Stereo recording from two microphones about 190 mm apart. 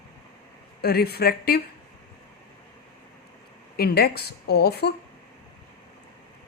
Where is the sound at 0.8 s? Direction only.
55° left (ahead or behind).